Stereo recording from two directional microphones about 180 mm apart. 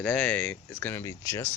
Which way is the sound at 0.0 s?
5° left (ahead or behind).